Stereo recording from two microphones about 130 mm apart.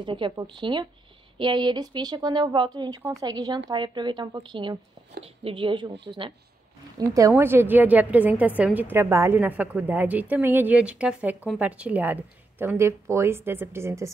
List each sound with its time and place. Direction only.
0.0 s speech: 40° right (ahead or behind)
7.2 s a woman's voice: 20° right (ahead or behind)